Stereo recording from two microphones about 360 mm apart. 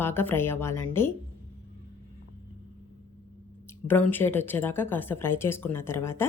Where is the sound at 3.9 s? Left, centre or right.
Centre.